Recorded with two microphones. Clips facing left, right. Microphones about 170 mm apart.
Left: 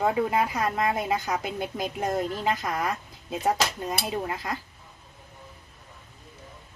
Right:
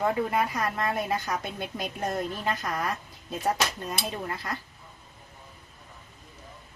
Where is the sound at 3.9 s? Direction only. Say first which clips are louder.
Left 3 dB; 10° left (ahead or behind).